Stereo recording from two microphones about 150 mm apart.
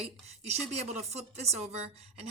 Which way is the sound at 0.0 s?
45° right (ahead or behind).